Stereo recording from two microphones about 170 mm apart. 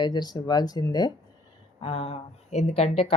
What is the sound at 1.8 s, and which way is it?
Speech, 35° left (ahead or behind).